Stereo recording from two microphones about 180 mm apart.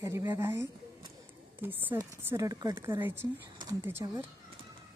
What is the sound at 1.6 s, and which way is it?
Speech, 10° right (ahead or behind).